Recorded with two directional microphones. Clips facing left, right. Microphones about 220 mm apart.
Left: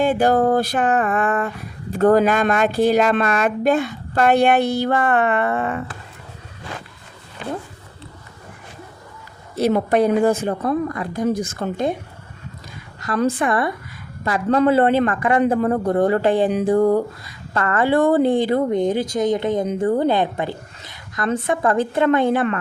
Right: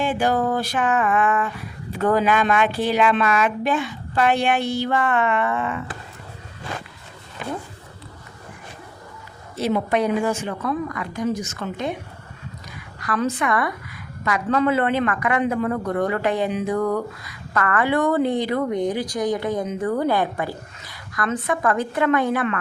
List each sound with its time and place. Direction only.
0.3 s speech: 45° left (ahead or behind)
4.6 s speech: 60° left (ahead or behind)
5.0 s speech: 40° left (ahead or behind)
5.5 s speech: 50° left (ahead or behind)
9.6 s speech: 40° left (ahead or behind)
13.4 s a woman's voice: 30° left (ahead or behind)